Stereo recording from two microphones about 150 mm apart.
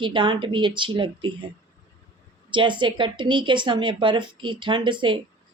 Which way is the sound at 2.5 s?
30° right (ahead or behind).